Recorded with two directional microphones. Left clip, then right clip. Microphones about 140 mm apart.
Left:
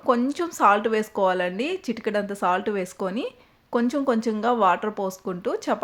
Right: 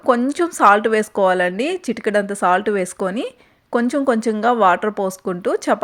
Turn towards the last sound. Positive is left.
turn(degrees=-35)  # may be behind; listen again after turning